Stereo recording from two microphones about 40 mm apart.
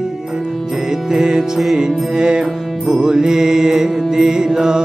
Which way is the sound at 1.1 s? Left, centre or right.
Centre.